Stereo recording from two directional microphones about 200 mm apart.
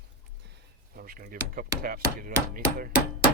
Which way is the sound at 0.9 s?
45° right (ahead or behind).